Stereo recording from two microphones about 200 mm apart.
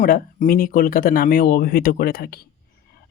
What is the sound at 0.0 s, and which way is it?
Speech, 45° left (ahead or behind).